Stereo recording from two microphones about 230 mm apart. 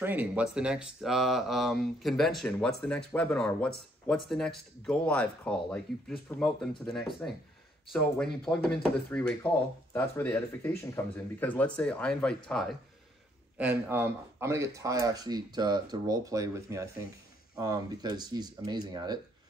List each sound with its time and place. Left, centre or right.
0.0 s speech: centre